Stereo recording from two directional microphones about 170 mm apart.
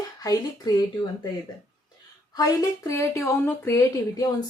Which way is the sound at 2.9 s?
15° left (ahead or behind).